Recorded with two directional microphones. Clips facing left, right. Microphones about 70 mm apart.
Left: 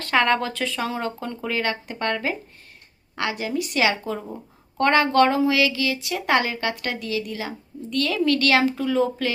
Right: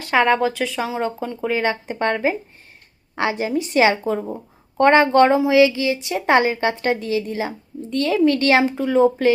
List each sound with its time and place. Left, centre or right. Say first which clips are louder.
0.0 s a woman's voice: right 4 dB; centre